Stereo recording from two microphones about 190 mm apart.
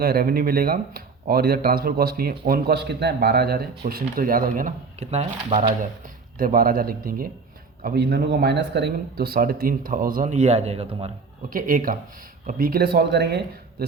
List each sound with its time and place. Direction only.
0.0 s speech: 55° right (ahead or behind); by 5.7 s 35° right (ahead or behind)
6.4 s speech: 50° right (ahead or behind)
11.4 s a man's voice: 45° right (ahead or behind)